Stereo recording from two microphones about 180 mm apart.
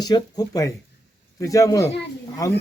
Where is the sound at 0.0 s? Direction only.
20° left (ahead or behind).